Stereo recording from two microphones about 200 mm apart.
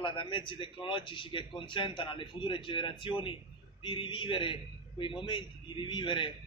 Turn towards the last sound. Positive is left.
turn(degrees=25)  # may be behind; listen again after turning